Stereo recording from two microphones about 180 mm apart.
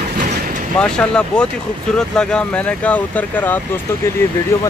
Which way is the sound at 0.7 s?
5° left (ahead or behind).